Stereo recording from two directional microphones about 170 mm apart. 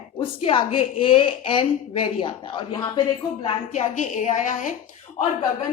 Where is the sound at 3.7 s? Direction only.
45° left (ahead or behind).